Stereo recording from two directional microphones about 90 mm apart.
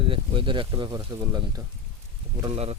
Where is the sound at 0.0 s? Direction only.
75° right (ahead or behind); by 1.6 s 45° right (ahead or behind).